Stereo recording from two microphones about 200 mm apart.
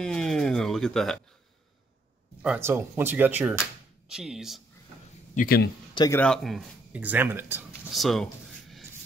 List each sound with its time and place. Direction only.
0.0 s a sound: 5° left (ahead or behind)
2.4 s speech: 10° right (ahead or behind)
5.3 s speech: 45° left (ahead or behind)
5.9 s a man's voice: 15° left (ahead or behind)
6.2 s speech: centre (ahead or behind)
7.9 s a sound: centre (ahead or behind)